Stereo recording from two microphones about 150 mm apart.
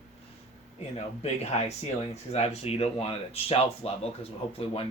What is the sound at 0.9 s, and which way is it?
Speech, 45° left (ahead or behind).